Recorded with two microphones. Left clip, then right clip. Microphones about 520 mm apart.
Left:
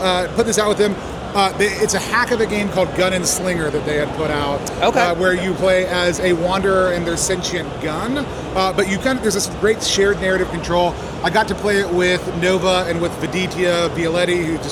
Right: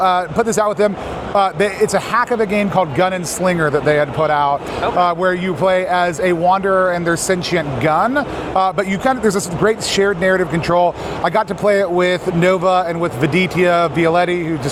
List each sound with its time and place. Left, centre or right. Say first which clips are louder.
0.0 s speech: right 3 dB; right
7.1 s speech: right 4 dB; right
8.5 s speech: right 2 dB; right